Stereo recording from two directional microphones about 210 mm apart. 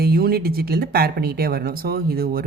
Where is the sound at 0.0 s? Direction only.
45° right (ahead or behind).